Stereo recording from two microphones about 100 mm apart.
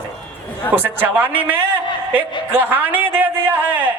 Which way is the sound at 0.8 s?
20° right (ahead or behind).